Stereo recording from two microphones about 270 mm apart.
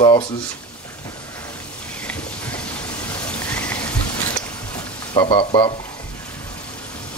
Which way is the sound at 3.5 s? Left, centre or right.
Centre.